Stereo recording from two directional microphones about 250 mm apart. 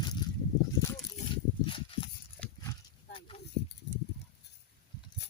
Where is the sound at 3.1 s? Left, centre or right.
Left.